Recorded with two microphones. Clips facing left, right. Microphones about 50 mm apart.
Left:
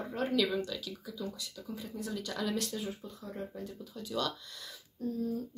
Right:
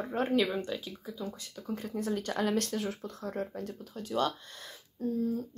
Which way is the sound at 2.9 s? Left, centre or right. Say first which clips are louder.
Right 4 dB; right.